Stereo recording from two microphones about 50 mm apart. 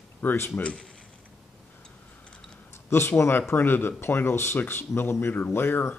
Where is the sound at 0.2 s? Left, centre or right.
Left.